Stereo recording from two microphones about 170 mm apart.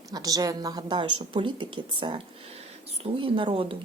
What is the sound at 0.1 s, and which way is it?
Speech, 20° right (ahead or behind).